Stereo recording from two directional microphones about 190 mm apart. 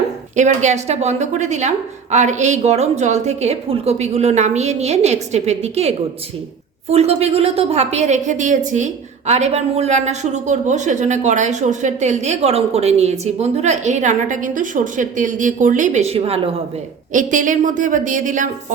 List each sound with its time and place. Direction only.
0.3 s a woman's voice: 40° right (ahead or behind)
17.1 s a woman's voice: 40° right (ahead or behind)